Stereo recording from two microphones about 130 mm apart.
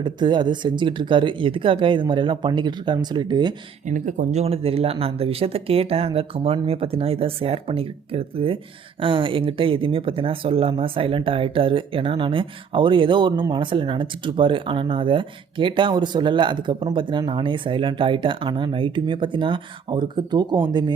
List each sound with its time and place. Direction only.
0.0 s speech: 35° right (ahead or behind)
3.8 s speech: 80° right; by 20.9 s 35° right (ahead or behind)